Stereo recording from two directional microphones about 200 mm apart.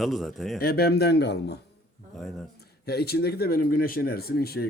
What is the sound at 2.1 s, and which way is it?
Speech, centre (ahead or behind).